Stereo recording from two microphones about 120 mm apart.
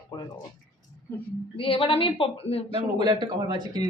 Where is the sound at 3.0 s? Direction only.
40° right (ahead or behind).